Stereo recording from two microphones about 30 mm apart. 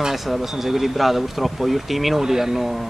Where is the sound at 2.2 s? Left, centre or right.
Centre.